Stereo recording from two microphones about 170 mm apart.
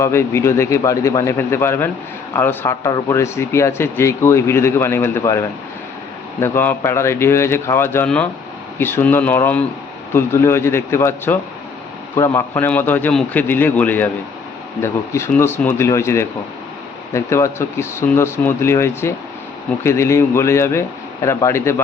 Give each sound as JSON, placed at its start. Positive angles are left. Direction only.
{"t": 0.0, "sound": "speech", "side_deg": 15}
{"t": 6.4, "sound": "speech", "side_deg": 15}